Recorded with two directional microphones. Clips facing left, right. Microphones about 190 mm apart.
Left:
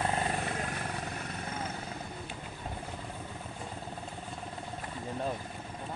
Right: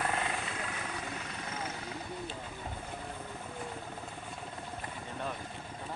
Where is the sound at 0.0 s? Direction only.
35° left (ahead or behind).